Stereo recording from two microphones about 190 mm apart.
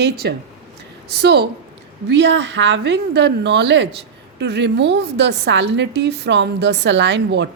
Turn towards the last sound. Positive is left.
turn(degrees=-70)  # may be behind; listen again after turning